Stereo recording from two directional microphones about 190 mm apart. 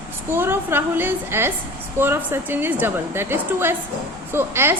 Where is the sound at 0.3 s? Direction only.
10° right (ahead or behind).